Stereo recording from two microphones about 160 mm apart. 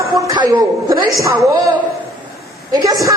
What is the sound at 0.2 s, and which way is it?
Speech, 25° right (ahead or behind).